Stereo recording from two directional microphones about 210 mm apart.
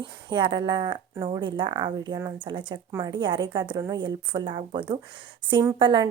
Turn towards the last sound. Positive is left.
turn(degrees=-20)  # may be behind; listen again after turning